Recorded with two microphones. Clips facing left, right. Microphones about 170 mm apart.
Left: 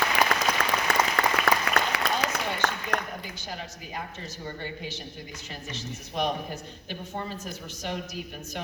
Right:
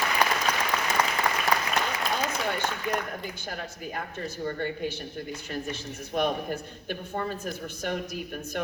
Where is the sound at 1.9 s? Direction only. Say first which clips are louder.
Left 1 dB; 70° left (ahead or behind).